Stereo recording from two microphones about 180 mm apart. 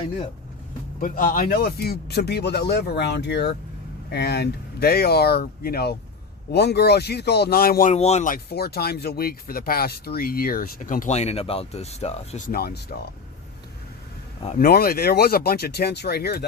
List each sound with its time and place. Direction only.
0.9 s speech: 50° left (ahead or behind)
7.9 s speech: 40° left (ahead or behind)
12.5 s speech: 60° left (ahead or behind)
14.5 s speech: 55° left (ahead or behind)